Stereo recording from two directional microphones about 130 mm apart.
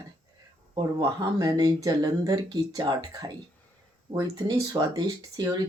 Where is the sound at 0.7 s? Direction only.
35° right (ahead or behind).